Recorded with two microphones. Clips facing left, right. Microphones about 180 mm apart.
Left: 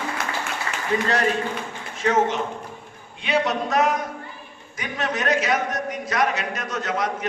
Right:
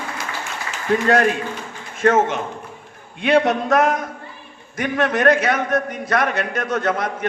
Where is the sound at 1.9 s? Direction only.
50° right (ahead or behind).